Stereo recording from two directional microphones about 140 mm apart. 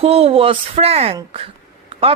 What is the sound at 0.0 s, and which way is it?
Speech, 45° right (ahead or behind).